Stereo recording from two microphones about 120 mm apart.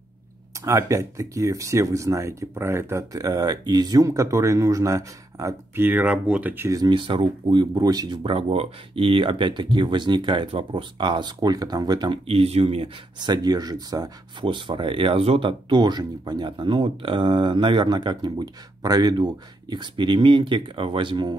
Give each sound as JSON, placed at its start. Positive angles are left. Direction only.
{"t": 0.7, "sound": "speech", "side_deg": -25}
{"t": 5.9, "sound": "speech", "side_deg": -10}
{"t": 6.8, "sound": "speech", "side_deg": -40}
{"t": 7.7, "sound": "speech", "side_deg": -30}
{"t": 12.3, "sound": "speech", "side_deg": -55}
{"t": 13.2, "sound": "speech", "side_deg": -35}
{"t": 14.4, "sound": "speech", "side_deg": -45}